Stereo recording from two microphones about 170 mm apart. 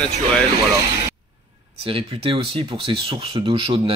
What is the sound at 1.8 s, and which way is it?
Speech, 30° right (ahead or behind).